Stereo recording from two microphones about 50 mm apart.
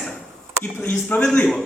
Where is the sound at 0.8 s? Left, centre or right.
Left.